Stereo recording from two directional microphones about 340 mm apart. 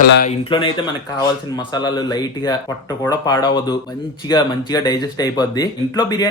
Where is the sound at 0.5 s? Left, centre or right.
Centre.